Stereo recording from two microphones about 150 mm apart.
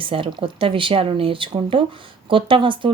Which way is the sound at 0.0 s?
35° right (ahead or behind).